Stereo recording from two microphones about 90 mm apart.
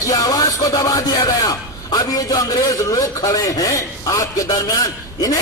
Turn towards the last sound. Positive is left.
turn(degrees=40)  # may be behind; listen again after turning